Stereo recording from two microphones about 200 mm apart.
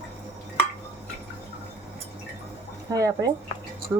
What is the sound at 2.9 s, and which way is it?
Speech, 15° right (ahead or behind).